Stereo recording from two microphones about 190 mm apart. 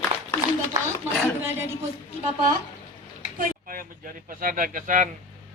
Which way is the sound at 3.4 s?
45° right (ahead or behind).